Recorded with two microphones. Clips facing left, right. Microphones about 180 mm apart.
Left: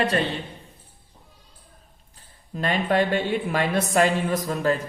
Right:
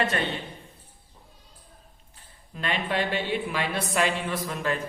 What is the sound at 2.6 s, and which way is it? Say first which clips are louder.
A woman's voice: left 6 dB; 45° left (ahead or behind).